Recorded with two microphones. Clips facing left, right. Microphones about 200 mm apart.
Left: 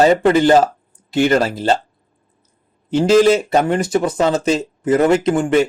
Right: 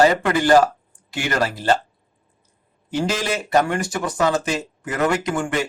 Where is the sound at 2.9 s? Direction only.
25° left (ahead or behind).